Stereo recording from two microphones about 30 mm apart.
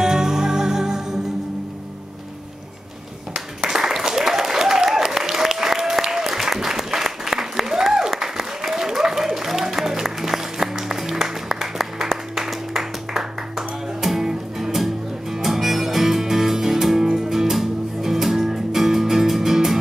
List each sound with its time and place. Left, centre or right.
0.0 s music: centre
3.3 s a sound: centre
4.1 s applause: centre
12.4 s music: centre